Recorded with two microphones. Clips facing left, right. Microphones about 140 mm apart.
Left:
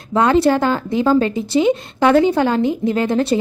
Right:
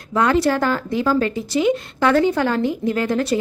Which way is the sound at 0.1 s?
25° left (ahead or behind).